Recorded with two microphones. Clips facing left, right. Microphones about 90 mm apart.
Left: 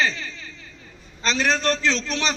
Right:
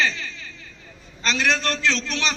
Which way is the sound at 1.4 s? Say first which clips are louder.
Even; 35° left (ahead or behind).